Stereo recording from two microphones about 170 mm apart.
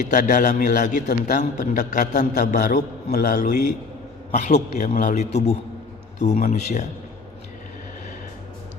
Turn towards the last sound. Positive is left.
turn(degrees=45)  # may be behind; listen again after turning